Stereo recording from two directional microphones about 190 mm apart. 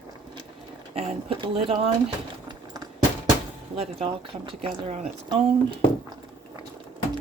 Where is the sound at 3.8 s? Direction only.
30° right (ahead or behind).